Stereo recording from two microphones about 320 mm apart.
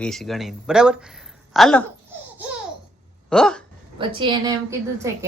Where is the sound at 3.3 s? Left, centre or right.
Centre.